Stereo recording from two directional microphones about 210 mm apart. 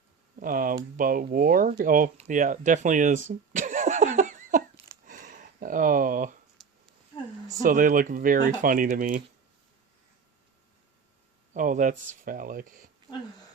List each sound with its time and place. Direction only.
0.3 s speech: 40° right (ahead or behind)
3.2 s a sound: 35° right (ahead or behind)
7.6 s speech: 40° right (ahead or behind)
11.5 s speech: 35° right (ahead or behind)